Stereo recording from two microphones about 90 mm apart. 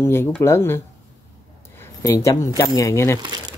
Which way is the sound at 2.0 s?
35° left (ahead or behind).